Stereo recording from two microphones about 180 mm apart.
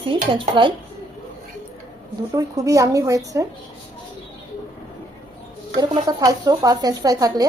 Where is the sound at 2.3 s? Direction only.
20° right (ahead or behind).